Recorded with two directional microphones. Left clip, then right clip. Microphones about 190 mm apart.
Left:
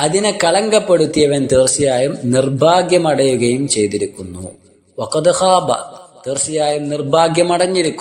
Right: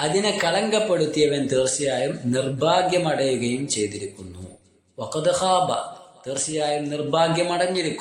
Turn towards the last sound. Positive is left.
turn(degrees=40)  # may be behind; listen again after turning